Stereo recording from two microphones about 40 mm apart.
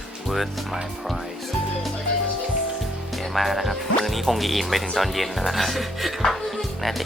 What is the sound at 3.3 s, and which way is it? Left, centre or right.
Speech, centre.